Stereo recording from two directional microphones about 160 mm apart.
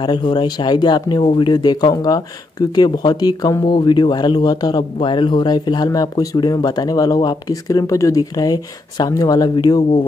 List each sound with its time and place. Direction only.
0.0 s speech: 30° left (ahead or behind)